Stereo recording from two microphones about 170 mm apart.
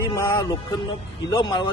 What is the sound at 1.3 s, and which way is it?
Speech, 25° left (ahead or behind).